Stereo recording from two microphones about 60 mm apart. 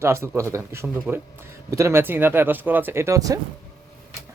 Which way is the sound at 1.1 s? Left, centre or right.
Right.